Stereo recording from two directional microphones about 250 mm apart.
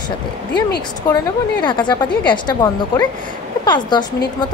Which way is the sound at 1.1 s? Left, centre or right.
Centre.